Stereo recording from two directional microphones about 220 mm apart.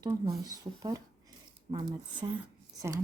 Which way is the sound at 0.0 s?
15° right (ahead or behind).